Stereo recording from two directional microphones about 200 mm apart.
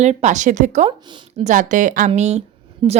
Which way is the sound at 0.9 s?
25° right (ahead or behind).